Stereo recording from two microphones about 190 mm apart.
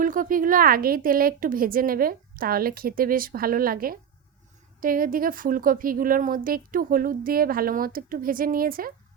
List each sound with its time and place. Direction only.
0.0 s a woman's voice: 45° right (ahead or behind)